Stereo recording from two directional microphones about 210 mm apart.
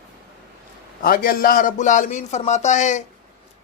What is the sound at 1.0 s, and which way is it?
Speech, 40° left (ahead or behind).